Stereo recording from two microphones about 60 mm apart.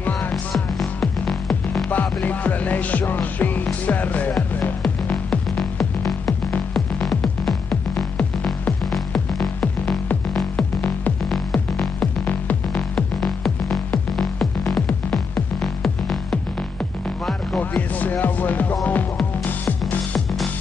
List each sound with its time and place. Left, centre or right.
0.0 s music: left
0.7 s music: centre
1.9 s music: left
5.6 s music: centre
9.6 s music: left
12.3 s music: left
12.9 s music: centre
14.9 s music: left
15.6 s music: centre
17.6 s music: left